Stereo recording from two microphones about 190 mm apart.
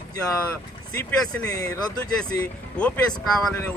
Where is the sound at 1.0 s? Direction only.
15° left (ahead or behind).